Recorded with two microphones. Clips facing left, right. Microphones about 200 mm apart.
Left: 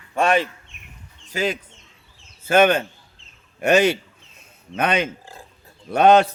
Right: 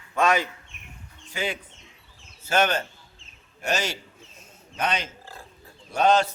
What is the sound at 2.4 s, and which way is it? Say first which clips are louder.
A man's voice: left 7 dB; 55° left (ahead or behind).